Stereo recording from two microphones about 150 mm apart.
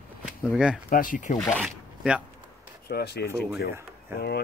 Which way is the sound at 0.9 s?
60° left (ahead or behind).